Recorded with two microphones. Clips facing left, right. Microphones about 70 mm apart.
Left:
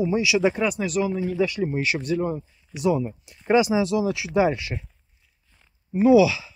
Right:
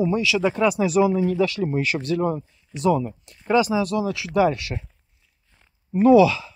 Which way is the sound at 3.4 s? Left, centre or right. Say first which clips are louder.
Even; left.